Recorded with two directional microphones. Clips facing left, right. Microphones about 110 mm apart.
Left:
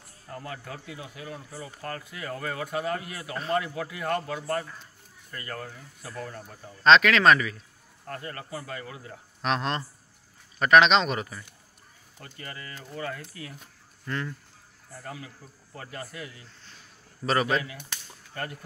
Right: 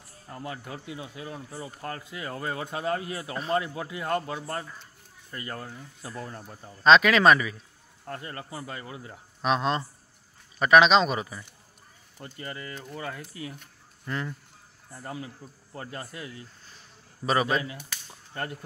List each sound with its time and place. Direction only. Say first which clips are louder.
0.3 s speech: right 1 dB; 20° right (ahead or behind)
6.8 s a man's voice: right 1 dB; 10° right (ahead or behind)
9.4 s a man's voice: right 3 dB; 5° right (ahead or behind)
12.2 s speech: right 4 dB; 25° right (ahead or behind)
12.9 s a man's voice: left 4 dB; 10° right (ahead or behind)
15.0 s speech: right 3 dB; 30° right (ahead or behind)